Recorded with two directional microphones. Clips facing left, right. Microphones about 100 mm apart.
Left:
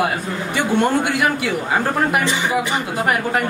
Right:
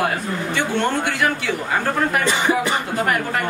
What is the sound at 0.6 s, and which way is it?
A man's voice, 10° left (ahead or behind).